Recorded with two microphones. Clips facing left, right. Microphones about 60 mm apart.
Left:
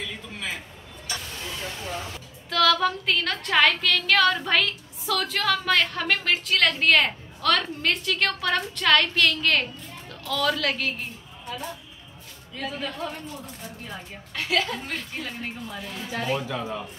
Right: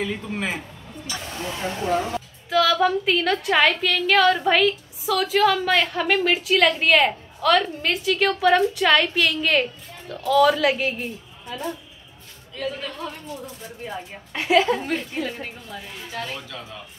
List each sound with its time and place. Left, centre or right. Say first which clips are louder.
0.0 s a man's voice: right 7 dB; right
1.9 s speech: right 11 dB; right
2.5 s a woman's voice: right 3 dB; centre
13.8 s a woman's voice: right 5 dB; right
14.9 s a woman's voice: right 7 dB; centre
16.1 s a woman's voice: left 4 dB; centre